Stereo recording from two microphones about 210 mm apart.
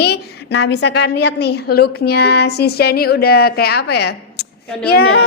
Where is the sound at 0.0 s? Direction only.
55° left (ahead or behind).